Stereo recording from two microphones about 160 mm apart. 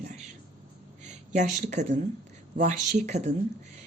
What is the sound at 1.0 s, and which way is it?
A woman's voice, 50° right (ahead or behind).